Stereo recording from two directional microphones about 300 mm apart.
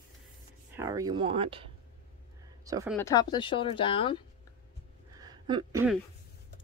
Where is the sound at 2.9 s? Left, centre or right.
Centre.